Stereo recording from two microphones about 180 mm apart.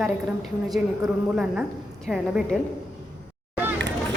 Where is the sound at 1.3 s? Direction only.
5° right (ahead or behind).